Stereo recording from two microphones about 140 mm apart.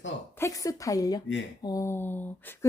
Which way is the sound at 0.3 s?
20° left (ahead or behind).